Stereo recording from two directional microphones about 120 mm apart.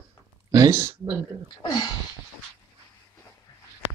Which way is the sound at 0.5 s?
25° right (ahead or behind).